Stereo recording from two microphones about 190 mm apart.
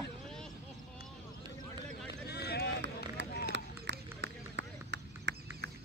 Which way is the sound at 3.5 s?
65° right (ahead or behind).